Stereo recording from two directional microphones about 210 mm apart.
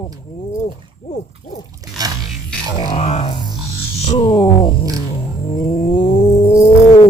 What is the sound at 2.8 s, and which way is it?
Music, 30° left (ahead or behind).